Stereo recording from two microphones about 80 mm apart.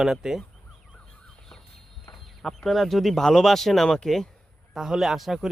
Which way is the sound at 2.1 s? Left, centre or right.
Centre.